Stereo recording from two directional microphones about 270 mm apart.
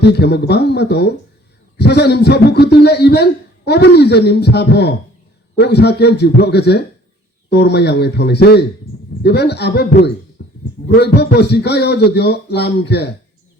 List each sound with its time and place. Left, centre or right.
0.0 s a man's voice: left
10.4 s a sound: left
10.8 s a man's voice: left